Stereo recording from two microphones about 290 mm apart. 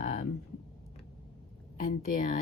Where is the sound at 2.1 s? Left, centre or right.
Left.